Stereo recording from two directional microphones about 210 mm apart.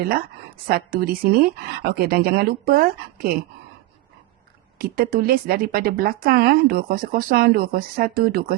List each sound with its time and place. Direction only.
0.0 s speech: 45° right (ahead or behind)
4.8 s speech: 45° right (ahead or behind)